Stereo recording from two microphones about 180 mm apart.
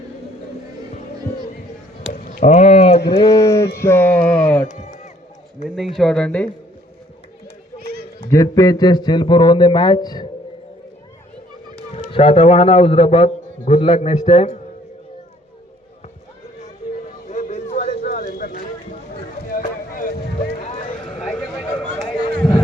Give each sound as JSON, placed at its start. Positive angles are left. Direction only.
{"t": 2.5, "sound": "speech", "side_deg": 35}
{"t": 3.2, "sound": "a sound", "side_deg": 20}
{"t": 3.8, "sound": "music", "side_deg": 10}
{"t": 5.6, "sound": "speech", "side_deg": 0}
{"t": 8.3, "sound": "speech", "side_deg": 20}
{"t": 11.9, "sound": "a man's voice", "side_deg": 30}
{"t": 17.2, "sound": "a sound", "side_deg": 45}
{"t": 20.6, "sound": "run", "side_deg": 40}
{"t": 21.2, "sound": "chatter", "side_deg": 0}
{"t": 22.4, "sound": "a sound", "side_deg": 5}